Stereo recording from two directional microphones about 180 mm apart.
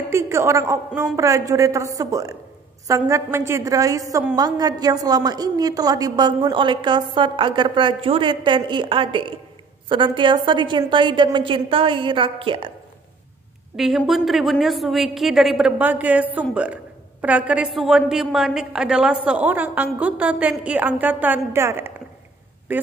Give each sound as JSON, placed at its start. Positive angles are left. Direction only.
{"t": 0.1, "sound": "a woman's voice", "side_deg": -15}
{"t": 13.7, "sound": "a woman's voice", "side_deg": 0}